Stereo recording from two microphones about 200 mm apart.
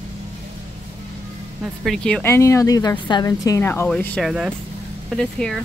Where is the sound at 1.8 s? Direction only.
5° left (ahead or behind).